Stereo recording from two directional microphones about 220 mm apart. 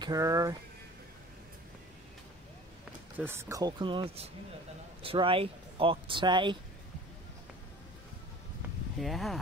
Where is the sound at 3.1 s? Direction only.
10° right (ahead or behind).